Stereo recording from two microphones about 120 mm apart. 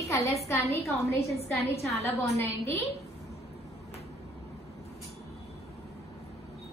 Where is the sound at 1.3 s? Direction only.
60° left (ahead or behind).